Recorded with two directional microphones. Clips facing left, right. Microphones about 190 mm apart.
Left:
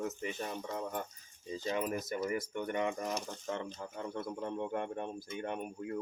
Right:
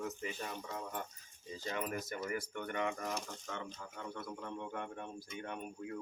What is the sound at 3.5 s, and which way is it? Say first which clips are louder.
A man's voice: left 7 dB; 30° left (ahead or behind).